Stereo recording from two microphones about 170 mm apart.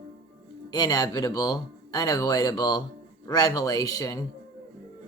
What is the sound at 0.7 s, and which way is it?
Speech, 25° left (ahead or behind).